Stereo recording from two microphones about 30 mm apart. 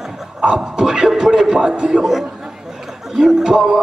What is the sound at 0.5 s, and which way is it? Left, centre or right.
A man's voice, right.